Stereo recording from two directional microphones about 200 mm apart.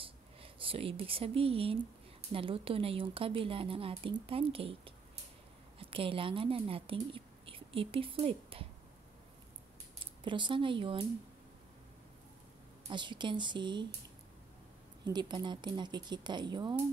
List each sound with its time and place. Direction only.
0.0 s a sound: 25° right (ahead or behind)
2.3 s a woman's voice: 25° right (ahead or behind)
10.2 s a woman's voice: 25° right (ahead or behind)
12.9 s a woman's voice: 25° right (ahead or behind)
15.0 s a woman's voice: 20° right (ahead or behind)